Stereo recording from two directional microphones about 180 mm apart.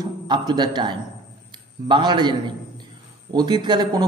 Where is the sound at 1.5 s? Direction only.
25° right (ahead or behind).